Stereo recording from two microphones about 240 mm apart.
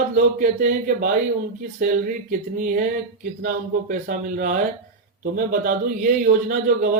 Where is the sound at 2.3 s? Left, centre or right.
Right.